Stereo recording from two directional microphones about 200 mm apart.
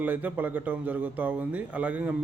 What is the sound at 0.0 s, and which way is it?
Speech, 10° right (ahead or behind).